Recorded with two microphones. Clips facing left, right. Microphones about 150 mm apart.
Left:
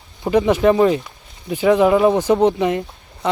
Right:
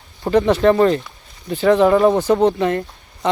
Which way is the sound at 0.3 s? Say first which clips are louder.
Even; 10° left (ahead or behind).